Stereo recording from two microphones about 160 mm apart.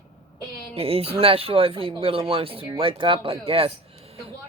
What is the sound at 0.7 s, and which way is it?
Speech, 40° right (ahead or behind).